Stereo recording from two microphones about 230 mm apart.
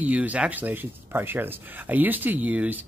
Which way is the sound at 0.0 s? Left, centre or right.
Centre.